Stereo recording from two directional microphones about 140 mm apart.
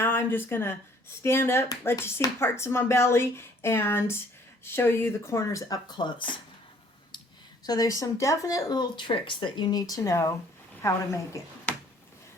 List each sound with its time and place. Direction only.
0.0 s speech: 15° left (ahead or behind); by 6.2 s 30° left (ahead or behind)
7.6 s speech: 25° left (ahead or behind)
11.7 s a sound: 10° left (ahead or behind)